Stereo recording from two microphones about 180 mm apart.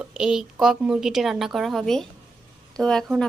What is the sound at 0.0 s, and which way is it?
A woman's voice, 5° right (ahead or behind).